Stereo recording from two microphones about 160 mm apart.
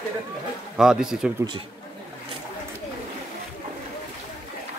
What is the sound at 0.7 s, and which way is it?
Speech, 5° right (ahead or behind).